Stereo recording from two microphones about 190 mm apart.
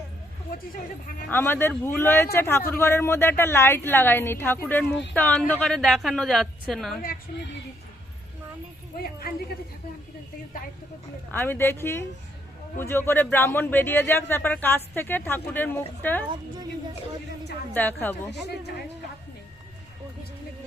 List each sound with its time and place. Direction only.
1.3 s a man's voice: 10° left (ahead or behind)
7.3 s speech: 45° left (ahead or behind)
9.2 s speech: 50° left (ahead or behind)
11.3 s a man's voice: 10° left (ahead or behind)
17.7 s a man's voice: 10° left (ahead or behind)